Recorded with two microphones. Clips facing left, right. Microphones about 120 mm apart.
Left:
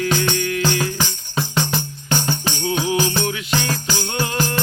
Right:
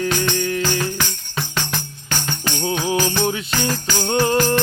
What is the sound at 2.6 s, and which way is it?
Music, 35° right (ahead or behind).